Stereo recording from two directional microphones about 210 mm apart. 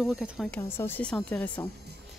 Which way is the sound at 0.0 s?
Centre (ahead or behind).